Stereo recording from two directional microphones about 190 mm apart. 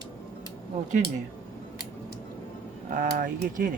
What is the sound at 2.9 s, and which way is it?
Speech, 45° right (ahead or behind).